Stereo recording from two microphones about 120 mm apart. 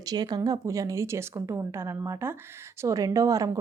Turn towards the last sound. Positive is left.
turn(degrees=-25)  # may be behind; listen again after turning